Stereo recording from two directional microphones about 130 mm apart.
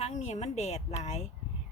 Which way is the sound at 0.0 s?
65° left (ahead or behind).